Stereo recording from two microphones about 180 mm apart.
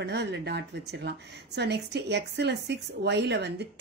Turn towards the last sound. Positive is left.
turn(degrees=-70)  # may be behind; listen again after turning